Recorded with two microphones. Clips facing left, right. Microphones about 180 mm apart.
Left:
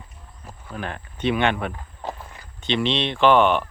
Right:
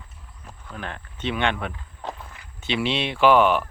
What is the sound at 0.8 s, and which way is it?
Speech, 45° left (ahead or behind).